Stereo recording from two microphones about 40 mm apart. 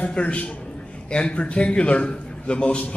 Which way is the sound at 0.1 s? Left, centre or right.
Left.